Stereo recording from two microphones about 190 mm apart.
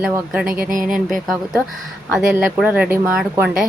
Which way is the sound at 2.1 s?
5° right (ahead or behind).